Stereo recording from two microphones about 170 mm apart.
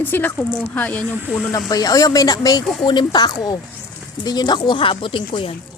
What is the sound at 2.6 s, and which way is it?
Speech, centre (ahead or behind).